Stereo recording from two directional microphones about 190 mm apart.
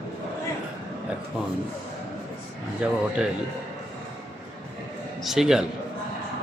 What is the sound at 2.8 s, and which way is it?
Speech, 5° right (ahead or behind).